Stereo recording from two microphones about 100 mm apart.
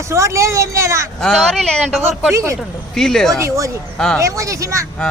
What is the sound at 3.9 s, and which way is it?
Speech, 5° left (ahead or behind).